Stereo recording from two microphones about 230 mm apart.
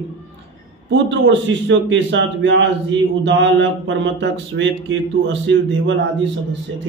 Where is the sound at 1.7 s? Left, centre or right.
Right.